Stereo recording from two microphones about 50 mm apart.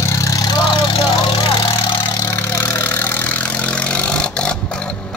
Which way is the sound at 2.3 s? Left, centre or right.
Left.